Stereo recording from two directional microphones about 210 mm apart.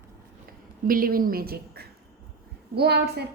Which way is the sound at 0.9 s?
45° right (ahead or behind).